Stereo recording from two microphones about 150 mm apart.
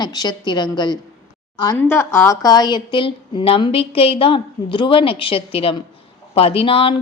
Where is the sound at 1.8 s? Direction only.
15° left (ahead or behind).